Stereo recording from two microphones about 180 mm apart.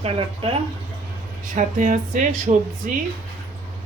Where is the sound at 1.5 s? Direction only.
45° right (ahead or behind).